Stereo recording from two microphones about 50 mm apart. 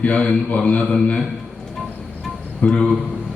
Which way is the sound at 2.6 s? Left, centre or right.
Centre.